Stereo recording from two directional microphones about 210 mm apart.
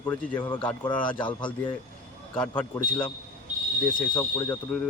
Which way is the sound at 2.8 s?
20° left (ahead or behind).